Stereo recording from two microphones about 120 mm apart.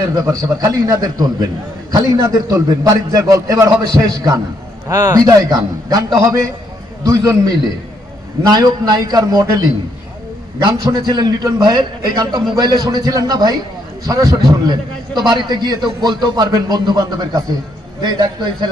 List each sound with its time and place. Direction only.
0.0 s a man's voice: 30° right (ahead or behind)